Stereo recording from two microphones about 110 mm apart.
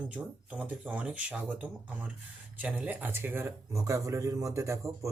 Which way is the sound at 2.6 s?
15° right (ahead or behind).